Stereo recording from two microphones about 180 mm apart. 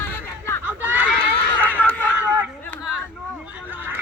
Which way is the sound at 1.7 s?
10° left (ahead or behind).